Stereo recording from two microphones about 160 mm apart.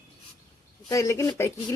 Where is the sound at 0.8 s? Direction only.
20° left (ahead or behind).